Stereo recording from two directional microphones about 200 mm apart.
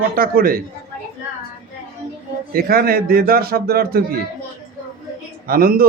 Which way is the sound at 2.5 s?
50° right (ahead or behind).